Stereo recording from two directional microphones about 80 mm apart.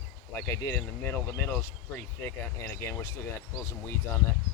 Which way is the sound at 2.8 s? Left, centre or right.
Left.